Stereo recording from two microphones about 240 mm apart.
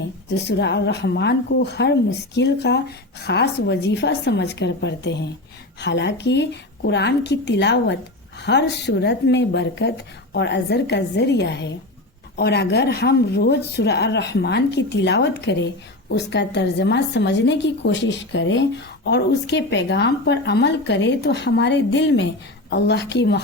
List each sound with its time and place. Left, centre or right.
0.4 s a woman's voice: left